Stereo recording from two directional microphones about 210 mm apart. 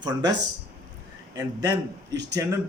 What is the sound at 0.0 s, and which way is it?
Speech, 20° right (ahead or behind).